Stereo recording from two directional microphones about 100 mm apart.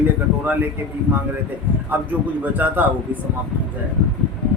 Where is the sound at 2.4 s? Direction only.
20° right (ahead or behind).